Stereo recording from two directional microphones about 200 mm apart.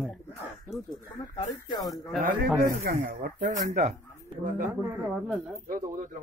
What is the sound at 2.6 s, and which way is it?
Speech, 45° right (ahead or behind).